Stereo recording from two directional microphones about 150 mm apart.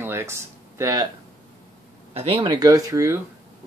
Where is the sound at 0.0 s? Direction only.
15° right (ahead or behind).